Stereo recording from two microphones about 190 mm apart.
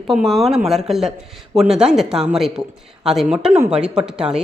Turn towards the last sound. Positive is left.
turn(degrees=-5)  # may be behind; listen again after turning